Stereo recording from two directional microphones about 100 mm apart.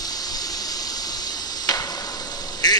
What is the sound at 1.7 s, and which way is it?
Tick-tock, 40° left (ahead or behind).